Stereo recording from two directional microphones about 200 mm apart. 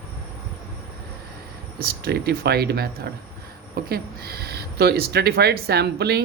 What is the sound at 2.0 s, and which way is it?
Speech, 55° right (ahead or behind).